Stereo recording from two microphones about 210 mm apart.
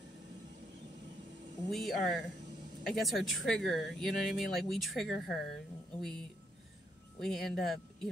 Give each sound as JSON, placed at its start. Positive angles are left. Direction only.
{"t": 1.7, "sound": "speech", "side_deg": 0}